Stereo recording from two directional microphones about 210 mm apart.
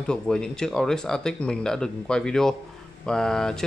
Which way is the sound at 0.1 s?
5° left (ahead or behind).